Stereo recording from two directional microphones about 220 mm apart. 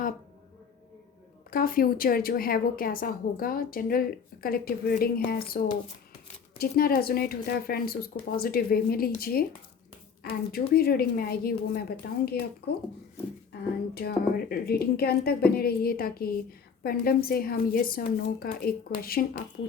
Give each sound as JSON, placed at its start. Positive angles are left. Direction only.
{"t": 1.5, "sound": "a woman's voice", "side_deg": 40}
{"t": 13.9, "sound": "speech", "side_deg": 45}